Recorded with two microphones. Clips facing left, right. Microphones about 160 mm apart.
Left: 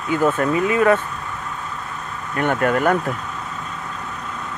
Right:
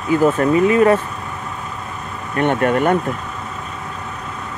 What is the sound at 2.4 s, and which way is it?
Speech, 25° right (ahead or behind).